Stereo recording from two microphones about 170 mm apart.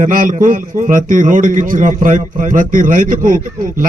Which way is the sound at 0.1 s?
55° right (ahead or behind).